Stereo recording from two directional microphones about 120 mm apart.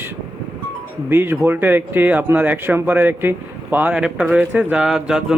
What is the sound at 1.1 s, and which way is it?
Speech, 20° right (ahead or behind).